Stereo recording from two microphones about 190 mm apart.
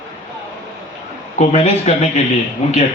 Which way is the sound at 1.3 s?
35° left (ahead or behind).